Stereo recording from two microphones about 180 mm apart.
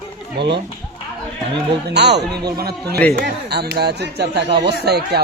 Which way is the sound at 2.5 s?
60° right (ahead or behind).